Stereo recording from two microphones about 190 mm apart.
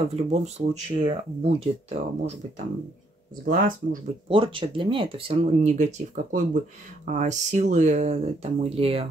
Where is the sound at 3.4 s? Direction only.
45° right (ahead or behind).